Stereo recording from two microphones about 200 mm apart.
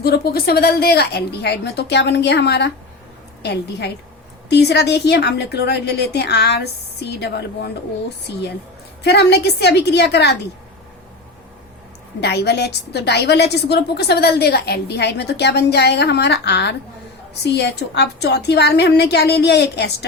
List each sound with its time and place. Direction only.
0.0 s a woman's voice: 50° left (ahead or behind)
9.0 s a woman's voice: 55° left (ahead or behind)
12.2 s a woman's voice: 55° left (ahead or behind)